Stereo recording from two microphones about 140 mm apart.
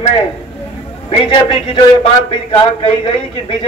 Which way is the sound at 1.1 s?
40° left (ahead or behind).